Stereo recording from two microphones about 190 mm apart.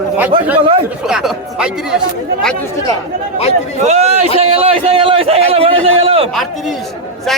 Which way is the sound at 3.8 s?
35° right (ahead or behind).